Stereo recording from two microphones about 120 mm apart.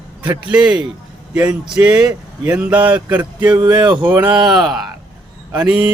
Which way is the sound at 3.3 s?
40° right (ahead or behind).